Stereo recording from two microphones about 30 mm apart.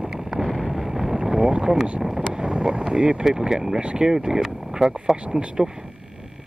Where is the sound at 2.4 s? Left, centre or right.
Right.